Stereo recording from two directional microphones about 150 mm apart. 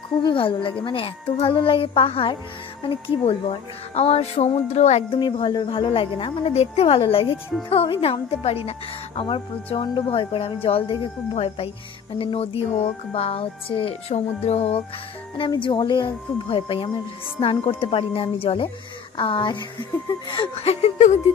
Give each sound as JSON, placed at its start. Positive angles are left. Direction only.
{"t": 0.2, "sound": "a woman's voice", "side_deg": 35}
{"t": 5.2, "sound": "a woman's voice", "side_deg": 30}